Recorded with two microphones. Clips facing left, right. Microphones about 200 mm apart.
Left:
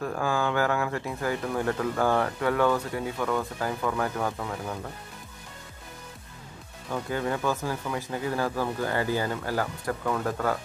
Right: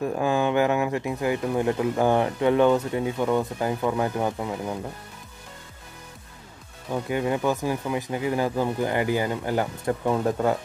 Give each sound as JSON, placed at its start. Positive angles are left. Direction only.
{"t": 0.0, "sound": "speech", "side_deg": -20}
{"t": 6.9, "sound": "speech", "side_deg": -20}